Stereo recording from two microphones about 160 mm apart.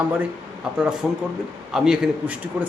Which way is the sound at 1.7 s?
5° right (ahead or behind).